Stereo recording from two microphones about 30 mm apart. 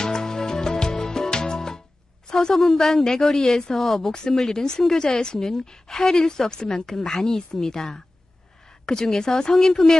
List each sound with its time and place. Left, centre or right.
0.0 s music: left
2.2 s a sound: left
2.5 s a woman's voice: centre
3.7 s a woman's voice: centre
8.9 s a woman's voice: centre